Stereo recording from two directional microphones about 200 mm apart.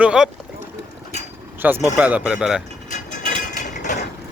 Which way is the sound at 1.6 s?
5° right (ahead or behind).